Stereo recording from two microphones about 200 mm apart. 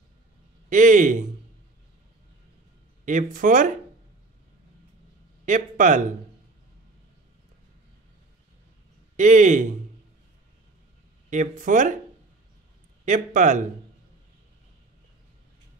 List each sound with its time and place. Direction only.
0.7 s speech: 40° right (ahead or behind)
3.1 s speech: 40° right (ahead or behind)
5.4 s speech: 40° right (ahead or behind)
9.1 s speech: 40° right (ahead or behind)
11.2 s speech: 40° right (ahead or behind)
13.0 s speech: 40° right (ahead or behind)